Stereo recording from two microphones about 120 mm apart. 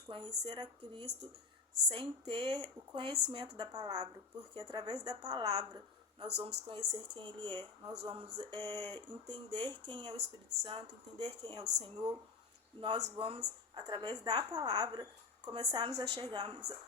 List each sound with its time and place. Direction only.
0.1 s a woman's voice: 40° right (ahead or behind)